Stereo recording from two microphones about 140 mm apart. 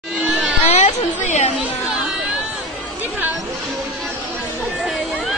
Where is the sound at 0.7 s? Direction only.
50° left (ahead or behind).